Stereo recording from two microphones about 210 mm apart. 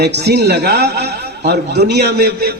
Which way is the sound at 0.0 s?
50° right (ahead or behind).